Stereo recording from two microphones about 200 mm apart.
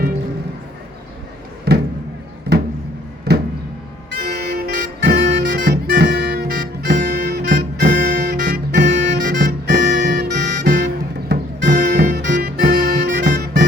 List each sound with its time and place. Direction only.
1.7 s a sound: 55° right (ahead or behind)
4.2 s music: 50° right (ahead or behind)
8.9 s music: 35° right (ahead or behind)
9.4 s music: 50° right (ahead or behind)